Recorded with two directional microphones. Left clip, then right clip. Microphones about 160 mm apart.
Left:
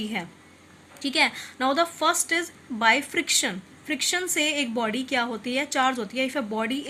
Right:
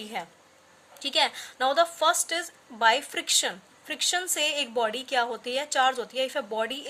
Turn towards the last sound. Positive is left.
turn(degrees=-50)  # may be behind; listen again after turning